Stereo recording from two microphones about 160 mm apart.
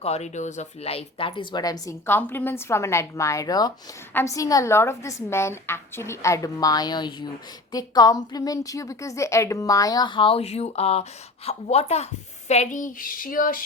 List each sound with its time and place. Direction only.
0.0 s a woman's voice: 45° left (ahead or behind)
12.5 s child singing: 50° left (ahead or behind)